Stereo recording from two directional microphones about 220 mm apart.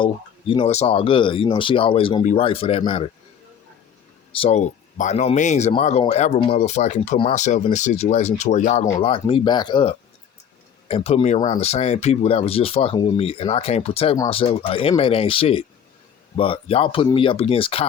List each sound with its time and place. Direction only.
0.0 s speech: 25° left (ahead or behind)
4.4 s speech: 30° left (ahead or behind)